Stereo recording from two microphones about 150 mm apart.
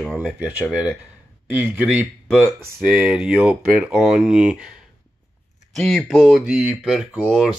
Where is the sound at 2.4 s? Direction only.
10° right (ahead or behind).